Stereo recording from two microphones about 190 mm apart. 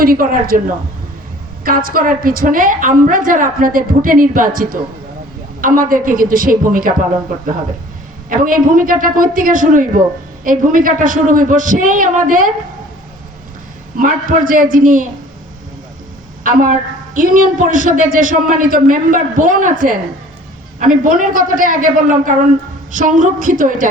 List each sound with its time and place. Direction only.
0.0 s a woman's voice: 50° right (ahead or behind)
1.6 s a woman's voice: 50° right (ahead or behind)
8.3 s a woman's voice: 45° right (ahead or behind)
13.9 s a woman's voice: 45° right (ahead or behind)
16.4 s a woman's voice: 45° right (ahead or behind)